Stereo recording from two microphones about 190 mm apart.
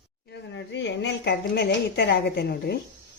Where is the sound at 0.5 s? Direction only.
70° left (ahead or behind).